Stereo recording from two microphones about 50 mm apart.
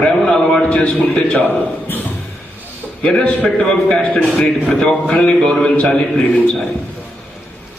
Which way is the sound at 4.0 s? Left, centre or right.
Left.